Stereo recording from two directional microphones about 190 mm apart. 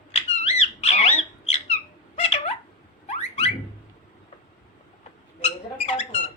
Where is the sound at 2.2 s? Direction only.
35° left (ahead or behind).